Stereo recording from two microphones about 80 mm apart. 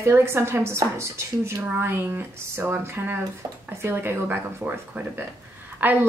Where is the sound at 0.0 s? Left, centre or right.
Right.